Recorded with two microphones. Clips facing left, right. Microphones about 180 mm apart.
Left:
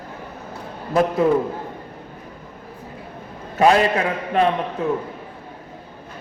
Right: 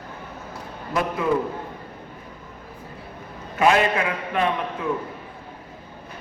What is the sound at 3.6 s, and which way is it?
Speech, 35° left (ahead or behind).